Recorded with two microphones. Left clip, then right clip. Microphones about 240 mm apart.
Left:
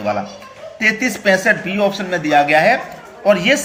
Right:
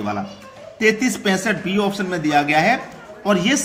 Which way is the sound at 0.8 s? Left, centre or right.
Right.